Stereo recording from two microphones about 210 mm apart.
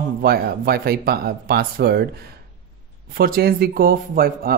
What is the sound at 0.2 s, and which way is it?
Speech, 45° right (ahead or behind).